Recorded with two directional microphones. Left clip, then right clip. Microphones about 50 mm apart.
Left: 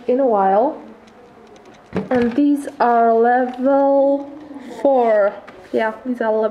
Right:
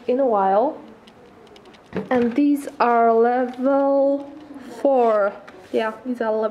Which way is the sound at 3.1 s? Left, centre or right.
Right.